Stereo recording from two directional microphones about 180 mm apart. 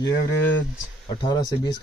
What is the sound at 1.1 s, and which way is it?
Speech, 25° left (ahead or behind).